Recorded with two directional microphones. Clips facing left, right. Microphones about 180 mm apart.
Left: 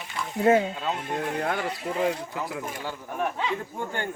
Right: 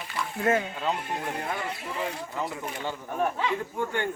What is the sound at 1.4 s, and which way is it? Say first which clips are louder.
Speech: left 4 dB; 70° left (ahead or behind).